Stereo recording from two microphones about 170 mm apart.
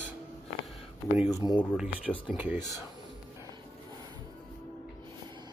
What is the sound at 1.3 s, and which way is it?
Speech, 25° left (ahead or behind).